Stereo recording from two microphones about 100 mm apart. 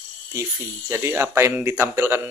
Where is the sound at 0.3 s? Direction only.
30° right (ahead or behind).